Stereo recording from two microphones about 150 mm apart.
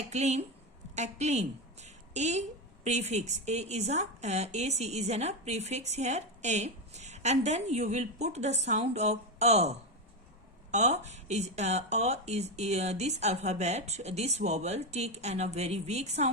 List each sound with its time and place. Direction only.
0.1 s a woman's voice: 50° right (ahead or behind)